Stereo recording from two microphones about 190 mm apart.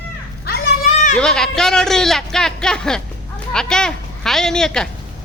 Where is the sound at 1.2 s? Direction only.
5° left (ahead or behind).